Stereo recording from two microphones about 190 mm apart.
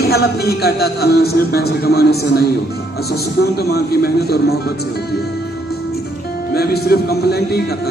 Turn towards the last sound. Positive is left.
turn(degrees=55)  # may be behind; listen again after turning